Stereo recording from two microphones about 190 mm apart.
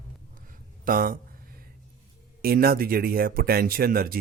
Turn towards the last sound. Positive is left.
turn(degrees=-50)  # may be behind; listen again after turning